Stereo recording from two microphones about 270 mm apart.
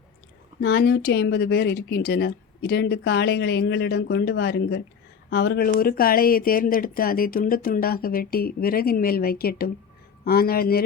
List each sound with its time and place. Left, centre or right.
0.6 s speech: left